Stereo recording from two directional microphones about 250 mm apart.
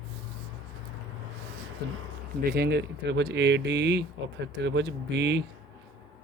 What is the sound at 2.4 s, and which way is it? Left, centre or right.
Speech, right.